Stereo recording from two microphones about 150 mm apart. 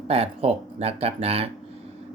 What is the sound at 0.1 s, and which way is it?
Speech, 40° right (ahead or behind).